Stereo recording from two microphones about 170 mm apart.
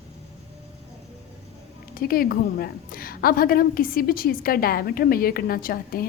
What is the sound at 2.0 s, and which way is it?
A woman's voice, 60° left (ahead or behind).